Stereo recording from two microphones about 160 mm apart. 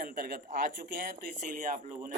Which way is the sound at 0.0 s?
65° right (ahead or behind).